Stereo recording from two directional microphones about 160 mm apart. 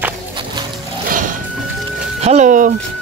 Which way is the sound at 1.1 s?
55° right (ahead or behind).